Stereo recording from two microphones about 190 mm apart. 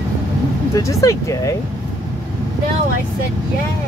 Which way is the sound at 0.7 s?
15° left (ahead or behind).